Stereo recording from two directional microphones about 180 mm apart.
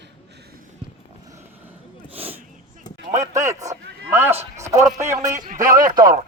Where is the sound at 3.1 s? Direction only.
40° right (ahead or behind).